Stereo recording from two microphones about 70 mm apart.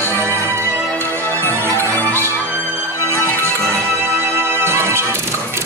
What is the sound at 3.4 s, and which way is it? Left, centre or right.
Music, right.